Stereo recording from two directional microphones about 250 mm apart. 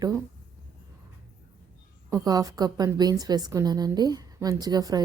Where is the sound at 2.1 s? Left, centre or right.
Centre.